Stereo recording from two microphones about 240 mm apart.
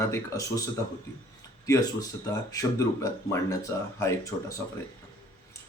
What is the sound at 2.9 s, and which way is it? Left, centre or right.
Speech, centre.